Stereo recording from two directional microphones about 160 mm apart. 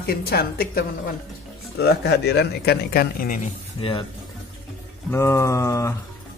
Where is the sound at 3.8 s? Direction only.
30° left (ahead or behind).